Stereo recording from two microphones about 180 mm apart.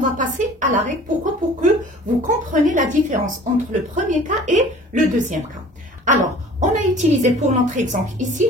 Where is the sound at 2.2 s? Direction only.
45° right (ahead or behind).